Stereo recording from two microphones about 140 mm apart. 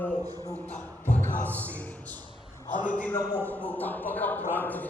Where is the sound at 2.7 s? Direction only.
65° left (ahead or behind).